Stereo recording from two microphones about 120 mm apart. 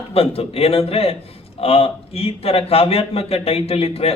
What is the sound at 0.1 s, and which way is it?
A man's voice, 55° left (ahead or behind).